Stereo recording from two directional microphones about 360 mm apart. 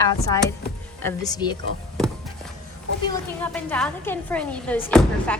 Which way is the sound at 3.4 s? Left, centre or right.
Centre.